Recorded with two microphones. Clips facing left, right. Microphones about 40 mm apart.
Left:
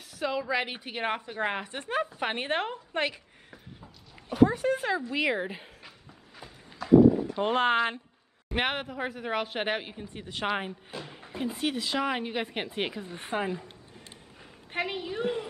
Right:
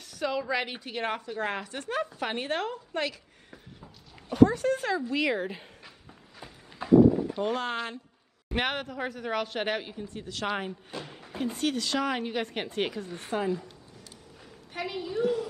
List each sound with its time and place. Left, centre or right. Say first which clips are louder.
0.1 s a woman's voice: even; centre; by 3.2 s left
3.4 s a sound: right 2 dB; centre
4.5 s speech: even; centre
5.1 s a sound: even; centre
6.8 s horse: left 1 dB; right
7.3 s speech: left 5 dB; left
8.5 s speech: even; centre
10.7 s speech: right 1 dB; centre; by 14.0 s left
14.7 s a sound: left 2 dB; left